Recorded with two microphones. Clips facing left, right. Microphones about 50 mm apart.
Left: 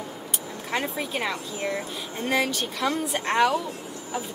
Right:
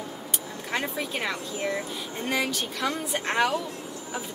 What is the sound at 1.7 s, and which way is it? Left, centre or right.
Speech, centre.